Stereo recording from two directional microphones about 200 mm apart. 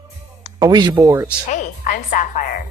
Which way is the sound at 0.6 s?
20° right (ahead or behind).